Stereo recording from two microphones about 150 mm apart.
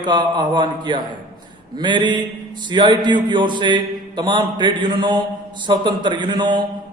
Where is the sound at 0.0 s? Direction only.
30° right (ahead or behind).